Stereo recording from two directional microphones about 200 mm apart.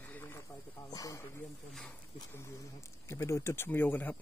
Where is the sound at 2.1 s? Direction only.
15° left (ahead or behind).